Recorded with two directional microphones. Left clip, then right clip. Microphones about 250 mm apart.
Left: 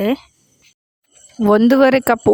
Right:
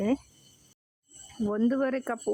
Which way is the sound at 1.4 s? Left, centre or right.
Left.